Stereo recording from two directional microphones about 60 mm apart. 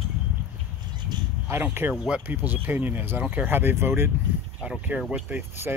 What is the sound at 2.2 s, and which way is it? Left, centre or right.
Speech, right.